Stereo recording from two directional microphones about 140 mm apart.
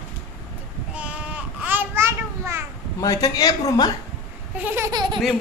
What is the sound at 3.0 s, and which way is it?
Speech, 25° left (ahead or behind).